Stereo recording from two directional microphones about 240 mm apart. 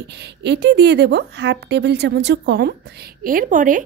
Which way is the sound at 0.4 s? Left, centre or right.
Right.